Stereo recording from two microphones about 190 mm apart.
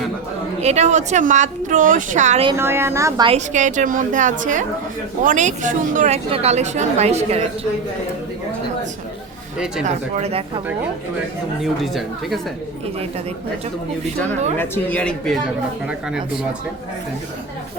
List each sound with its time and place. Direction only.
0.6 s speech: 35° right (ahead or behind)
2.6 s speech: 15° right (ahead or behind)
3.2 s speech: 40° right (ahead or behind)
9.8 s speech: 35° right (ahead or behind)
11.6 s speech: centre (ahead or behind)
14.6 s a man's voice: 10° left (ahead or behind)